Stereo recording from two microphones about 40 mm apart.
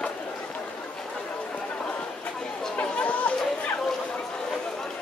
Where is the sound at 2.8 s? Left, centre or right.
Left.